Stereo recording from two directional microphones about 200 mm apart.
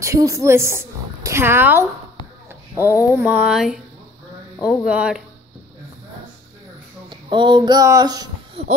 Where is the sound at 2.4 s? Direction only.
10° right (ahead or behind).